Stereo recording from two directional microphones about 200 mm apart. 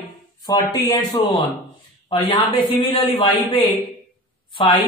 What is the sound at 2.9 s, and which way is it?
A woman's voice, 25° left (ahead or behind).